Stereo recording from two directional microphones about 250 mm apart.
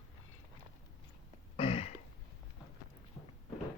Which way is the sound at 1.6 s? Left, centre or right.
Left.